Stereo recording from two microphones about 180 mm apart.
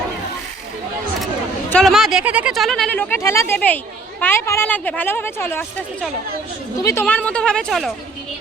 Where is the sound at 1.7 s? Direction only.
5° left (ahead or behind).